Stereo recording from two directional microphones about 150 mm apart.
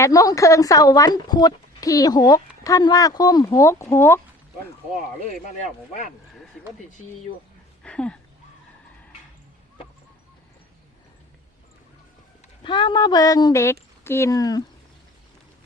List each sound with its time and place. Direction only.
0.0 s speech: 25° left (ahead or behind)
5.2 s speech: 50° left (ahead or behind)
7.9 s speech: 5° left (ahead or behind)
12.6 s speech: 30° left (ahead or behind)